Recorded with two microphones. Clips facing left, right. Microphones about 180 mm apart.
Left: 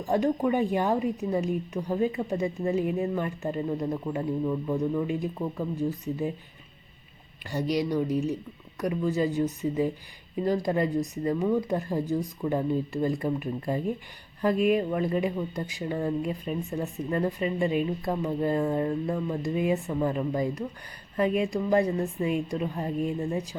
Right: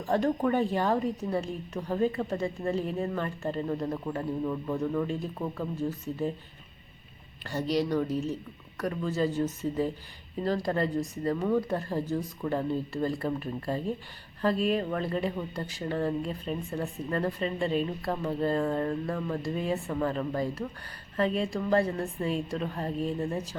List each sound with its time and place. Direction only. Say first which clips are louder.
0.0 s speech: left 2 dB; 15° left (ahead or behind)
7.4 s speech: left 1 dB; 10° left (ahead or behind)